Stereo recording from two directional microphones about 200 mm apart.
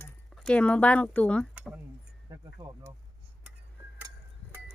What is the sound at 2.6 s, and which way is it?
Speech, 20° right (ahead or behind).